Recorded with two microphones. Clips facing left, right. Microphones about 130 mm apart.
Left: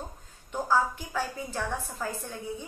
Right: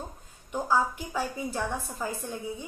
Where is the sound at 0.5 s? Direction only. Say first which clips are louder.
Even; 10° right (ahead or behind).